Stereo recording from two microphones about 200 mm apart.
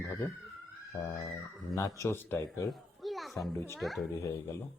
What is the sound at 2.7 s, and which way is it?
Children playing, centre (ahead or behind).